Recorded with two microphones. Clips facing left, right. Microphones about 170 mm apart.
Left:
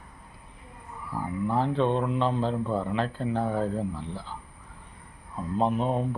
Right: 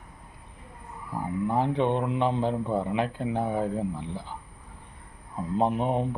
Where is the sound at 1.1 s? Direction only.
20° right (ahead or behind).